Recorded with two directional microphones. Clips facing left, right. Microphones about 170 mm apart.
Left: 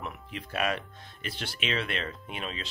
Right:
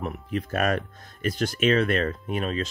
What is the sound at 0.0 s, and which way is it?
Speech, 45° right (ahead or behind).